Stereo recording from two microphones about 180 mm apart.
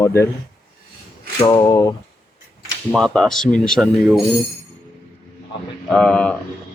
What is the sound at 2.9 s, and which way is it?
Speech, centre (ahead or behind).